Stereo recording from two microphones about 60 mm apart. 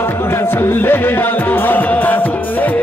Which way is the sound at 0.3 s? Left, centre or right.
Left.